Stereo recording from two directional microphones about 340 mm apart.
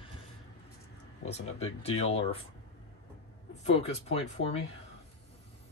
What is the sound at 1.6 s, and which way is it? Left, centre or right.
Speech, centre.